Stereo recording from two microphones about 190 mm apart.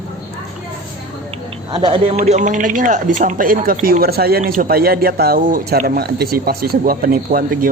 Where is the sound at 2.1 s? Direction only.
40° right (ahead or behind).